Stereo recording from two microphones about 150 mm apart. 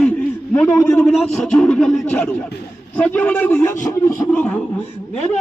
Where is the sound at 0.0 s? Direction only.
10° left (ahead or behind).